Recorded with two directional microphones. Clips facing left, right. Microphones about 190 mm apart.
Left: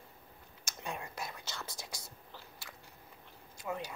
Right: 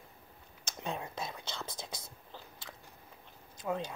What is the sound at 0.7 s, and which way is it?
Whispering, 20° right (ahead or behind).